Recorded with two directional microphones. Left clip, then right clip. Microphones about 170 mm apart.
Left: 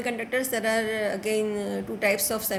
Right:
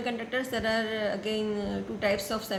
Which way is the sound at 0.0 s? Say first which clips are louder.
Left 4 dB; 35° left (ahead or behind).